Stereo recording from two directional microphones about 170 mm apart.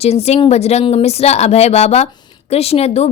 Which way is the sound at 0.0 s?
40° left (ahead or behind).